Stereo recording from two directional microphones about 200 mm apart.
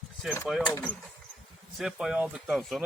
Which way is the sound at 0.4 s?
Centre (ahead or behind).